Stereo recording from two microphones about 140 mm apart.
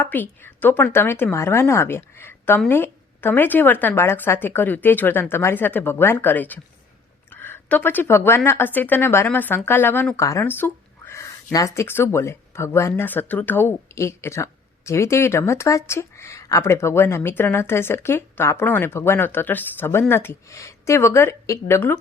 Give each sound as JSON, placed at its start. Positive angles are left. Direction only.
{"t": 0.0, "sound": "a woman's voice", "side_deg": 15}